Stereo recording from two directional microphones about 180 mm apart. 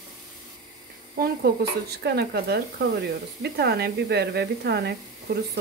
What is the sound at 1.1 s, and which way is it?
Speech, 60° right (ahead or behind).